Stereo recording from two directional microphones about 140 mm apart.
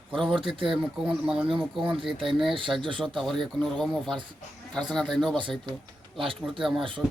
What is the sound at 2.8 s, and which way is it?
Speech, 35° right (ahead or behind).